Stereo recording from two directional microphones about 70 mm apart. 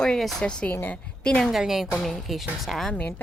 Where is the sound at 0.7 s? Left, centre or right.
Left.